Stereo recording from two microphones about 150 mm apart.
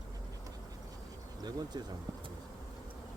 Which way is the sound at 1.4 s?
25° right (ahead or behind).